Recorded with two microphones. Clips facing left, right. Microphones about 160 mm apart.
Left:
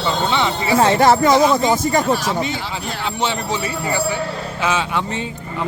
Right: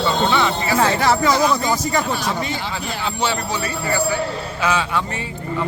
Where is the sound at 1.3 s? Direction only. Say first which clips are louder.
Left 4 dB; 25° left (ahead or behind).